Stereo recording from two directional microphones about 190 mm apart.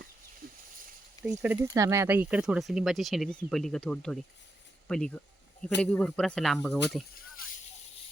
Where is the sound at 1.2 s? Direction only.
5° right (ahead or behind).